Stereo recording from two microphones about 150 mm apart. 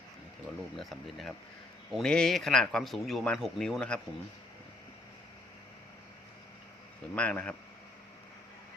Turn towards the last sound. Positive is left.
turn(degrees=10)  # may be behind; listen again after turning